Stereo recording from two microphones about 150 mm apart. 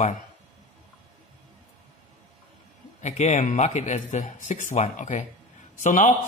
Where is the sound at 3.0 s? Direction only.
50° left (ahead or behind).